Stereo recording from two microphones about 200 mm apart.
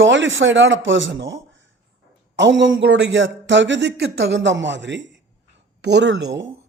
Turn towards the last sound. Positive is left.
turn(degrees=-60)  # may be behind; listen again after turning